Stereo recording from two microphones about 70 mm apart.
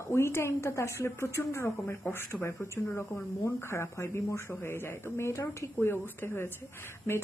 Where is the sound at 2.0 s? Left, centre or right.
Left.